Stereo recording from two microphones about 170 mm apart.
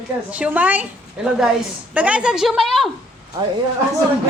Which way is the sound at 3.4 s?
20° right (ahead or behind).